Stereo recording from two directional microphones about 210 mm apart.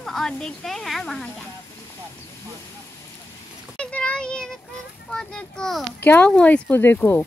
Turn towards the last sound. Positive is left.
turn(degrees=10)  # may be behind; listen again after turning